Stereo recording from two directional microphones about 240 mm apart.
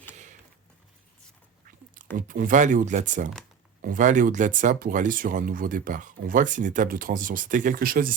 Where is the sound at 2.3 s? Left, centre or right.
Right.